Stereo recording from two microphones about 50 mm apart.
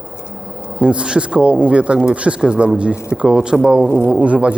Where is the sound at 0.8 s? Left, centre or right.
Right.